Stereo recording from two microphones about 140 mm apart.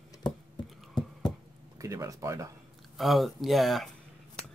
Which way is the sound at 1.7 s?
20° right (ahead or behind).